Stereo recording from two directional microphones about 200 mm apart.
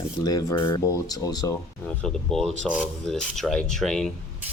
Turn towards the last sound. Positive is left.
turn(degrees=0)  # may be behind; listen again after turning